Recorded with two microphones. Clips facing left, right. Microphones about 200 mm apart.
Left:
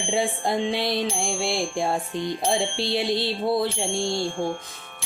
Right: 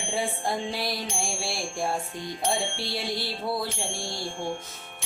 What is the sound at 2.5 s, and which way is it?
Speech, 15° left (ahead or behind).